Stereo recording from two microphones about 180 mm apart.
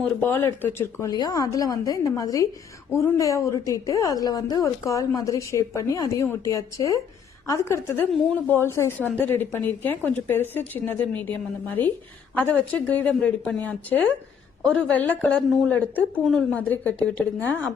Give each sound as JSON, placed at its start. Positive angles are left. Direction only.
{"t": 0.0, "sound": "a woman's voice", "side_deg": 10}